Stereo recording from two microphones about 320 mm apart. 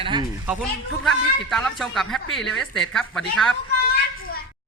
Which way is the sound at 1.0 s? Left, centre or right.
Centre.